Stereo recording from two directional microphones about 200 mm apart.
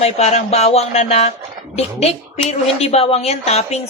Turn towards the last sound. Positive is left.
turn(degrees=30)  # may be behind; listen again after turning